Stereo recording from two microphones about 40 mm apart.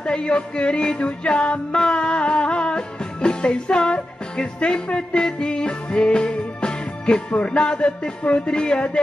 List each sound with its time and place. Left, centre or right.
0.0 s music: left